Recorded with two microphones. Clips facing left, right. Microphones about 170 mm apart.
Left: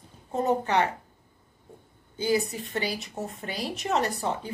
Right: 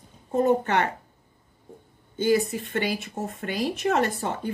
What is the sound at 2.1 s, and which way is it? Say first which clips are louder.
Speech: right 4 dB; 55° right (ahead or behind).